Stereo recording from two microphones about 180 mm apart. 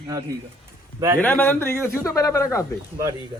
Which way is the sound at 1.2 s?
10° left (ahead or behind).